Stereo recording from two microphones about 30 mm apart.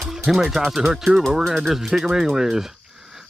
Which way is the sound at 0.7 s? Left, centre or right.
Centre.